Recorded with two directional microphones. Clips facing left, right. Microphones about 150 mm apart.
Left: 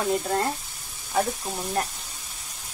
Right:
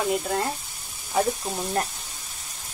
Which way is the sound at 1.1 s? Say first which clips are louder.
Right 2 dB; 10° right (ahead or behind).